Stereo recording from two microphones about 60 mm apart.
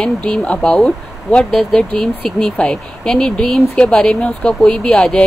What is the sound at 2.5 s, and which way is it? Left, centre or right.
Speech, centre.